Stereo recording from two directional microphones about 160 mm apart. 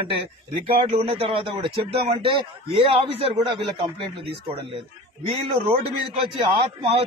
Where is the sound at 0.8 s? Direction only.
35° right (ahead or behind).